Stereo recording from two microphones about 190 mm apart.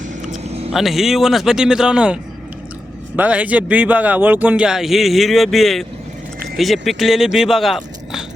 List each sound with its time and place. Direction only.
0.2 s a sound: 35° right (ahead or behind)
0.7 s a man's voice: centre (ahead or behind)
3.2 s a man's voice: 5° right (ahead or behind)